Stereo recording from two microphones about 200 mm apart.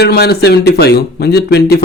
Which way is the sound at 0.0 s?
55° left (ahead or behind).